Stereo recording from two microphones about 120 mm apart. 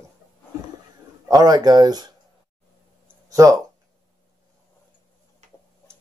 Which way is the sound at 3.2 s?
30° right (ahead or behind).